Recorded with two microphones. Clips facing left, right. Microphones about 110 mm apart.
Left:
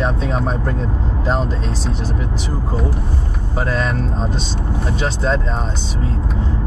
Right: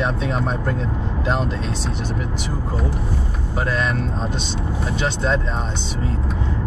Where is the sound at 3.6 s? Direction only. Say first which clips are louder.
Left 2 dB; centre (ahead or behind).